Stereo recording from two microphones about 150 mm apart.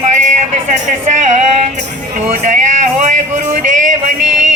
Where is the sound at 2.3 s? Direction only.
55° right (ahead or behind).